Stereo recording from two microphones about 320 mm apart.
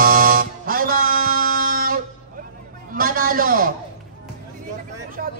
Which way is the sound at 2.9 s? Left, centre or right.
Right.